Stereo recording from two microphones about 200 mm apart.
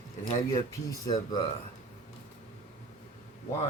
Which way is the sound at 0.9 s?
20° left (ahead or behind).